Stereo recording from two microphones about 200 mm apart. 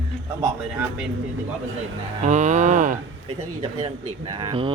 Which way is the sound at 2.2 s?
35° right (ahead or behind).